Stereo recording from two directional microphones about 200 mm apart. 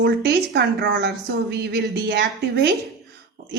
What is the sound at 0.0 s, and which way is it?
Speech, 55° right (ahead or behind).